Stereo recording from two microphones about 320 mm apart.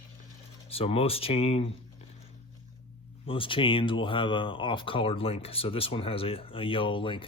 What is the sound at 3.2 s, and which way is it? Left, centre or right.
Speech, centre.